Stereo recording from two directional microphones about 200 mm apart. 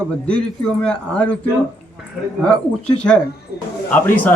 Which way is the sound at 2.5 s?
5° left (ahead or behind).